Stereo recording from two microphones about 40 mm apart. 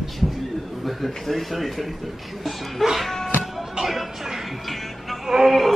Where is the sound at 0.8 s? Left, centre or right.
Centre.